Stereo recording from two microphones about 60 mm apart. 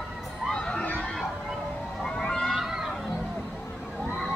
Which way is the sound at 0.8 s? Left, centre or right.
Left.